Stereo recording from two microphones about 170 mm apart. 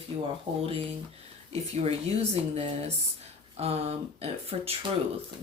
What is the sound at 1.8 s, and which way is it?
Speech, 35° right (ahead or behind).